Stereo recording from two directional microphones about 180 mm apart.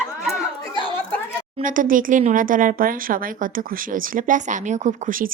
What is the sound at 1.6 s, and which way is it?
Speech, 50° right (ahead or behind).